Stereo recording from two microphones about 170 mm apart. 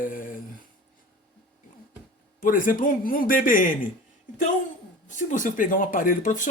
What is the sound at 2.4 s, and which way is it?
Speech, 55° left (ahead or behind).